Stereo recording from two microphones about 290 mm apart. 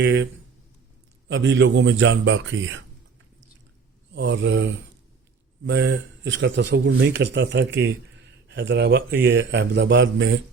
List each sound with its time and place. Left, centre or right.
0.0 s a man's voice: right
1.3 s a man's voice: right
4.1 s a man's voice: right